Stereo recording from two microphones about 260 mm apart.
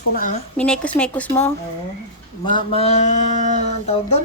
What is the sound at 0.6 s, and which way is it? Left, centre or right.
Speech, centre.